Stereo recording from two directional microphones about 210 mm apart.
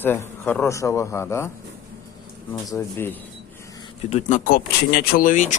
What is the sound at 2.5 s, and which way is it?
Speech, 15° left (ahead or behind).